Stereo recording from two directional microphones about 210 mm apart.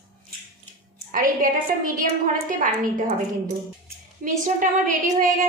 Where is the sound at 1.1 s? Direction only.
40° right (ahead or behind).